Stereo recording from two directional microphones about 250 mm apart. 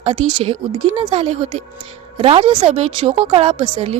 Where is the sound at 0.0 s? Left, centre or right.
Right.